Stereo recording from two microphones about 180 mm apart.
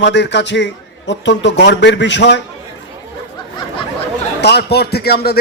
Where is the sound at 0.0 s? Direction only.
80° left.